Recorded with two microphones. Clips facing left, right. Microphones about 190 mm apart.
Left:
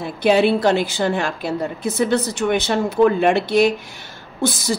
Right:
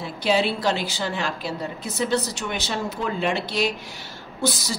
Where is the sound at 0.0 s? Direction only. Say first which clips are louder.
Left 6 dB; 55° left (ahead or behind).